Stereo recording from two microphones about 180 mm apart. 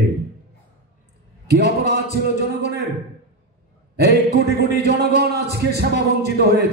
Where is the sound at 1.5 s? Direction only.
65° right (ahead or behind).